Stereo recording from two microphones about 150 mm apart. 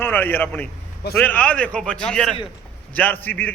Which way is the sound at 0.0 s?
15° left (ahead or behind).